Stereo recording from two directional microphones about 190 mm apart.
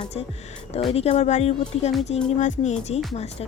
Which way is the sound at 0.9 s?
35° left (ahead or behind).